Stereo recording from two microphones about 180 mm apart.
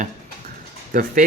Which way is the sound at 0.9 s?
55° right (ahead or behind).